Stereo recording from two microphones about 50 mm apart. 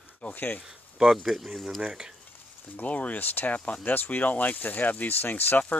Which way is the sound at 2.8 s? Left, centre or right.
Left.